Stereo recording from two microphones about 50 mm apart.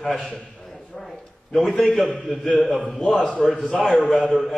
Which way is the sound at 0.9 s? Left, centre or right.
Centre.